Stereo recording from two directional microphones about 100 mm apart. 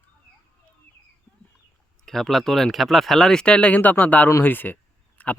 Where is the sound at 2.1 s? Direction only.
5° left (ahead or behind).